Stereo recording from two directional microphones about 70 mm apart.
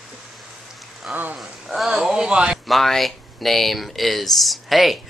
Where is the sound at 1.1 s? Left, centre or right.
Right.